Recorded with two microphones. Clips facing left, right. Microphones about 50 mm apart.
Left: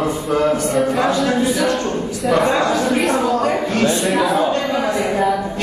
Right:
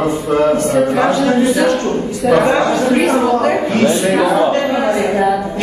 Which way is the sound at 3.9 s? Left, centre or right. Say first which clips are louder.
Right 4 dB; centre.